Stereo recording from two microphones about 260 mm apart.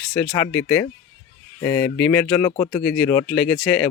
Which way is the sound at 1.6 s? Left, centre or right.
Centre.